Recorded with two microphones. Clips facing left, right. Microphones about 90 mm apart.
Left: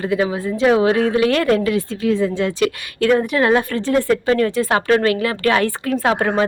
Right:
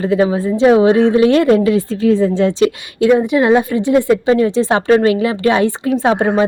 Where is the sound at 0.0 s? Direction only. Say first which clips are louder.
Right 5 dB; 30° right (ahead or behind).